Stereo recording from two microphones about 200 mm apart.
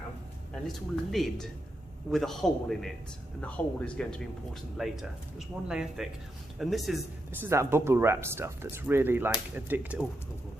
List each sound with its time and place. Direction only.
0.5 s speech: centre (ahead or behind)
7.3 s speech: 10° right (ahead or behind)